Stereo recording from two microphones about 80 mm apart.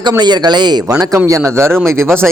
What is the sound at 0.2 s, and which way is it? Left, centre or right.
Speech, right.